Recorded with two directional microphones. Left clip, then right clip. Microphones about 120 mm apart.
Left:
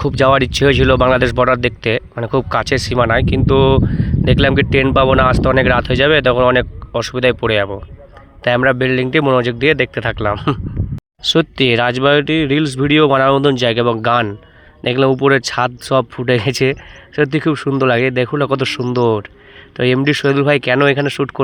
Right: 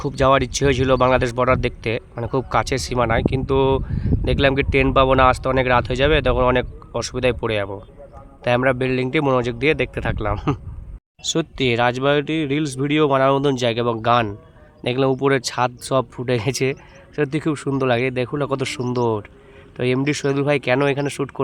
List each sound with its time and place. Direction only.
0.0 s speech: 40° left (ahead or behind)